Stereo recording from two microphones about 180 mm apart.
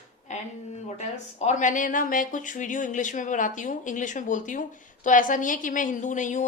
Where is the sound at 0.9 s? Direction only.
40° left (ahead or behind).